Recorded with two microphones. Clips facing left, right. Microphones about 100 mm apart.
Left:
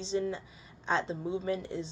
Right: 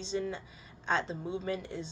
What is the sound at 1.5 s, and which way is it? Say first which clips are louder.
Speech: left 3 dB; 30° left (ahead or behind).